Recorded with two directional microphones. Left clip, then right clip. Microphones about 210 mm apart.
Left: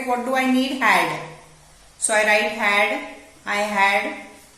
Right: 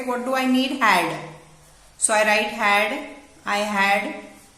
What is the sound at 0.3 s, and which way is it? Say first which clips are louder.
Speech: right 2 dB; 15° right (ahead or behind).